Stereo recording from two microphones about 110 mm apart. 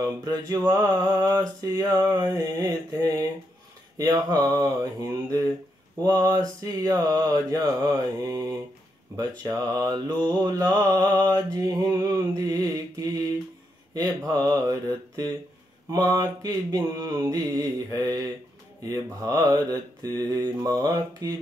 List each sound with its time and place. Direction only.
0.2 s mantra: 40° right (ahead or behind)
6.0 s mantra: 40° right (ahead or behind)